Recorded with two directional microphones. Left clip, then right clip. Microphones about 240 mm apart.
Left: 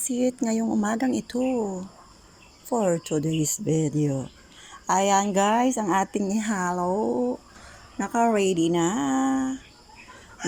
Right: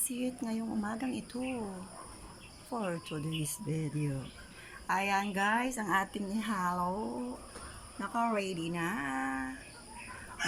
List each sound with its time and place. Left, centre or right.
0.2 s speech: left
2.6 s a woman's voice: left
7.9 s a woman's voice: left